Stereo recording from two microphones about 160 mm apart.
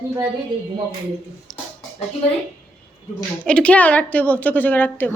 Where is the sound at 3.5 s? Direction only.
5° left (ahead or behind).